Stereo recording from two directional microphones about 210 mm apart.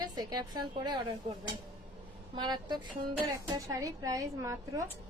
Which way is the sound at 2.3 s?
20° right (ahead or behind).